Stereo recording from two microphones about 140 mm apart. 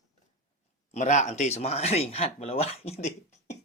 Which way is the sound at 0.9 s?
55° left (ahead or behind).